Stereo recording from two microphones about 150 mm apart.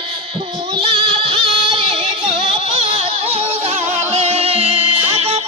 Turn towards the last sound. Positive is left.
turn(degrees=-45)  # may be behind; listen again after turning